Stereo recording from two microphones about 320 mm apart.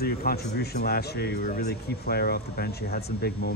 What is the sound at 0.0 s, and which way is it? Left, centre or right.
Speech, left.